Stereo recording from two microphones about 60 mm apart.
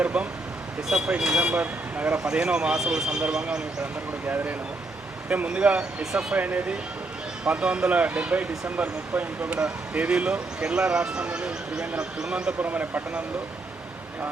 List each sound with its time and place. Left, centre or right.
0.0 s speech: right
2.1 s speech: centre
5.3 s speech: right
6.0 s speech: centre
6.3 s speech: right
9.6 s speech: centre
12.6 s speech: right